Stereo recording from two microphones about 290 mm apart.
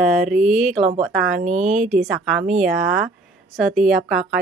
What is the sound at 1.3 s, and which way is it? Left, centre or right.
Speech, right.